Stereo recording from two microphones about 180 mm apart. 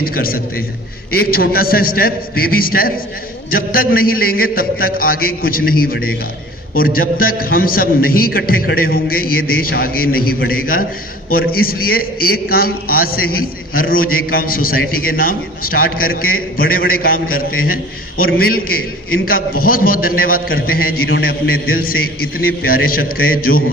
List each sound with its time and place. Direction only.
0.0 s a man's voice: 55° left (ahead or behind)